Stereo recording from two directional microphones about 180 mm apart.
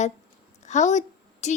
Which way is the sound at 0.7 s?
40° left (ahead or behind).